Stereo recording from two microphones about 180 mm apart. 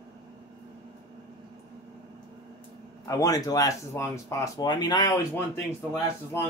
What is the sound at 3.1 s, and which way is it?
Speech, 20° left (ahead or behind).